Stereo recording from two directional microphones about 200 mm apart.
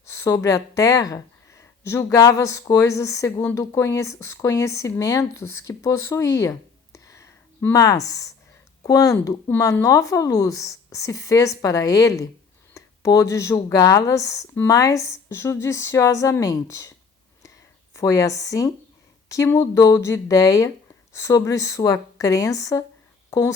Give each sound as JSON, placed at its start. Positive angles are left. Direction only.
{"t": 0.1, "sound": "speech", "side_deg": 15}
{"t": 12.7, "sound": "a sound", "side_deg": 15}
{"t": 13.3, "sound": "speech", "side_deg": 15}
{"t": 17.9, "sound": "speech", "side_deg": 15}